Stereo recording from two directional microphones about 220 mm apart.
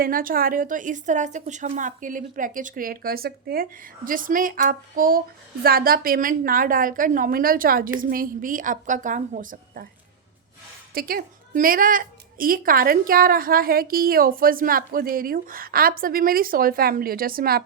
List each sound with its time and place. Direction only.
0.0 s a woman's voice: 40° right (ahead or behind)
10.9 s a woman's voice: 40° right (ahead or behind)